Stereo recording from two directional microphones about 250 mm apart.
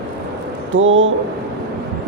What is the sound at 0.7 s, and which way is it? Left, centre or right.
Speech, right.